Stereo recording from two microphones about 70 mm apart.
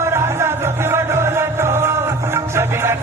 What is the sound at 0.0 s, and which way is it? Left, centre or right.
Music, right.